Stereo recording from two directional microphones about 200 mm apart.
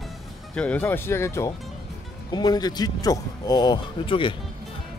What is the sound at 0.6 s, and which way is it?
Speech, 10° left (ahead or behind).